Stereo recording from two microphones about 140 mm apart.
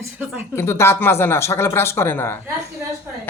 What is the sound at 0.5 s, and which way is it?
Speech, 15° left (ahead or behind).